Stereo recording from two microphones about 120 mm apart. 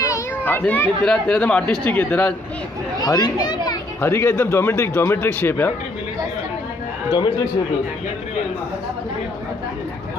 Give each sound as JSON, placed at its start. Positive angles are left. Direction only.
{"t": 0.4, "sound": "a man's voice", "side_deg": 15}
{"t": 3.0, "sound": "speech", "side_deg": 35}
{"t": 4.0, "sound": "speech", "side_deg": 20}
{"t": 7.1, "sound": "speech", "side_deg": 40}